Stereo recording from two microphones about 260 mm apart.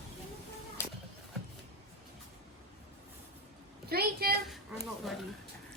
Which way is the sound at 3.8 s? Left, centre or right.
Right.